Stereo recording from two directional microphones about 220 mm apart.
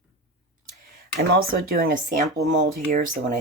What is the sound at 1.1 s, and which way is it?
Speech, 45° right (ahead or behind).